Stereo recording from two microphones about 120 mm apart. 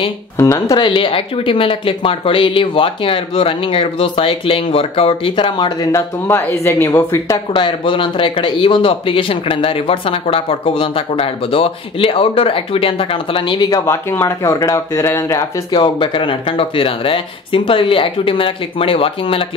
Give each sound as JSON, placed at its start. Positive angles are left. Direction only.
{"t": 0.4, "sound": "speech", "side_deg": 25}
{"t": 0.7, "sound": "speech", "side_deg": 45}
{"t": 5.9, "sound": "speech", "side_deg": 25}
{"t": 7.5, "sound": "speech", "side_deg": 40}
{"t": 13.7, "sound": "speech", "side_deg": 30}
{"t": 15.7, "sound": "speech", "side_deg": 45}